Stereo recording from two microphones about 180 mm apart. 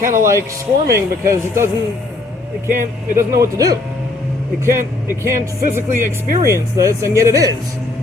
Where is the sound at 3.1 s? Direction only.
15° right (ahead or behind).